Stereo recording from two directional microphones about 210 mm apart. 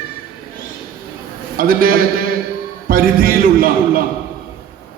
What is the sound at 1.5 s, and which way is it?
A man's voice, 45° right (ahead or behind).